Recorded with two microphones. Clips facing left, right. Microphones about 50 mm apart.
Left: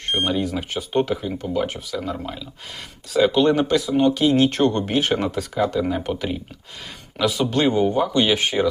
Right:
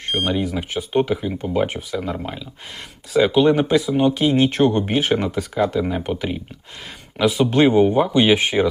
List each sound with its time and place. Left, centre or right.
0.1 s speech: centre